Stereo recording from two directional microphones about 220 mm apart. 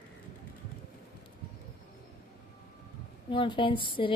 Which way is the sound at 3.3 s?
20° left (ahead or behind).